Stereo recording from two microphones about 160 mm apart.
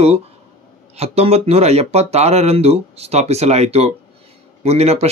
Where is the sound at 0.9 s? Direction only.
40° right (ahead or behind).